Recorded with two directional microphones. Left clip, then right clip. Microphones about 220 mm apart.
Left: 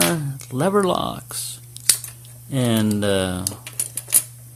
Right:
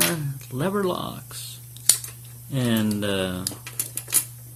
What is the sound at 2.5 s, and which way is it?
Speech, 45° left (ahead or behind).